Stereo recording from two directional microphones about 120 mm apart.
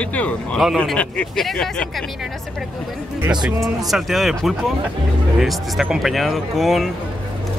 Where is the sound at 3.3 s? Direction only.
5° right (ahead or behind).